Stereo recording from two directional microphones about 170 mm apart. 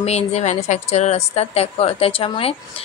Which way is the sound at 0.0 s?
40° left (ahead or behind).